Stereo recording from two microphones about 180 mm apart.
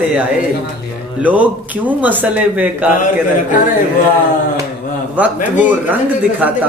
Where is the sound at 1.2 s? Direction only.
10° right (ahead or behind).